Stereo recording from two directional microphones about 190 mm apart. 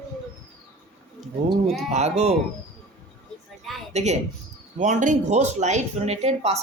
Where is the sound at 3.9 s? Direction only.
35° right (ahead or behind).